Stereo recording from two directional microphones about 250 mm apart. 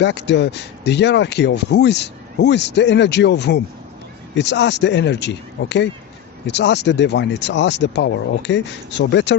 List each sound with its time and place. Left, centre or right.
0.0 s speech: left